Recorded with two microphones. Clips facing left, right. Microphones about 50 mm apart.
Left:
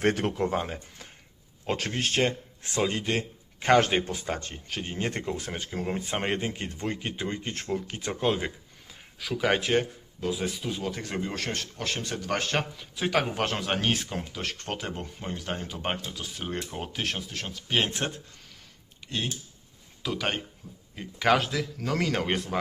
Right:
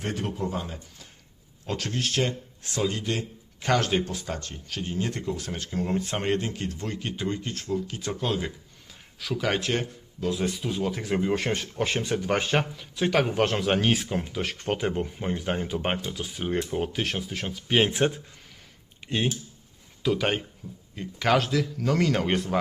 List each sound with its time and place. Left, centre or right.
0.0 s a man's voice: left
5.7 s speech: centre
7.5 s speech: left
9.1 s speech: centre
20.0 s speech: centre